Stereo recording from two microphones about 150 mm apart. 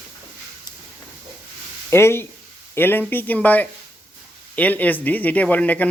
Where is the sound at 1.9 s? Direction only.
15° left (ahead or behind).